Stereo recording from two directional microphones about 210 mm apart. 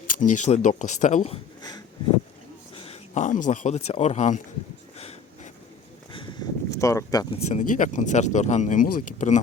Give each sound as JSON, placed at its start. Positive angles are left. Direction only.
{"t": 0.2, "sound": "speech", "side_deg": 35}
{"t": 2.7, "sound": "speech", "side_deg": 30}
{"t": 4.9, "sound": "a sound", "side_deg": 30}
{"t": 6.7, "sound": "speech", "side_deg": 15}
{"t": 7.4, "sound": "speech", "side_deg": 35}